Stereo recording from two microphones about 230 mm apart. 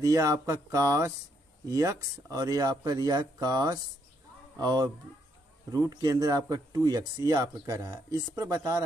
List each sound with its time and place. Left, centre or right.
0.0 s speech: centre